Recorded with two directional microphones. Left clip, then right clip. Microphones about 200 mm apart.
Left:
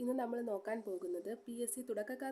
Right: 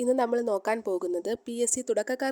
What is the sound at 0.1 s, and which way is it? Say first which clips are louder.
A woman's voice: right 14 dB; 45° right (ahead or behind).